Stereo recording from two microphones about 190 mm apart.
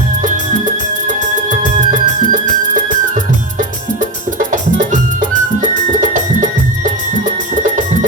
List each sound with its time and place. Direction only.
0.2 s music: 40° right (ahead or behind)
4.4 s music: 40° right (ahead or behind)